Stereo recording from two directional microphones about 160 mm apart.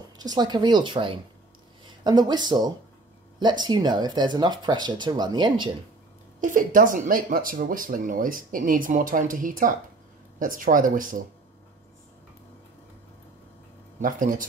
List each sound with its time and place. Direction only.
0.2 s speech: 25° right (ahead or behind)
6.4 s speech: 55° right (ahead or behind)
13.9 s speech: 55° right (ahead or behind)